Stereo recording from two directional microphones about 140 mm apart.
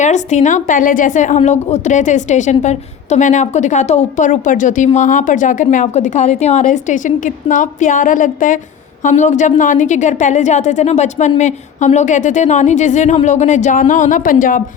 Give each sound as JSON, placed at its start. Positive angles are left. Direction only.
{"t": 0.0, "sound": "a woman's voice", "side_deg": 60}